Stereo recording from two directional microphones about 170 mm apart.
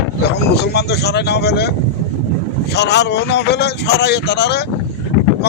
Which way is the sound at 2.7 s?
80° left.